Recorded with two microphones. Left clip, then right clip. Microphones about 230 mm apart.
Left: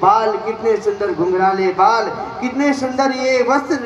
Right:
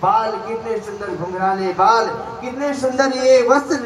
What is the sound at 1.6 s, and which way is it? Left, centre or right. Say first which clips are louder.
A man's voice: left 1 dB; left.